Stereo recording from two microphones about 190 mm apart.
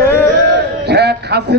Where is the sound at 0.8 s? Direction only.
60° right (ahead or behind).